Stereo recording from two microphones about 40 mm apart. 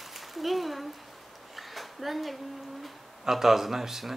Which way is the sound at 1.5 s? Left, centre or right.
Centre.